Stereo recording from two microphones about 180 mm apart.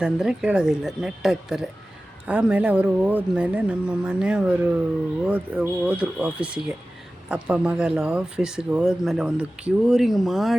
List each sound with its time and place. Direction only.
0.0 s speech: 5° right (ahead or behind)